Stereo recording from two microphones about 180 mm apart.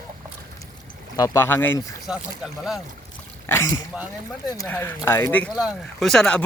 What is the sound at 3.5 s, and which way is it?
Speech, 15° left (ahead or behind).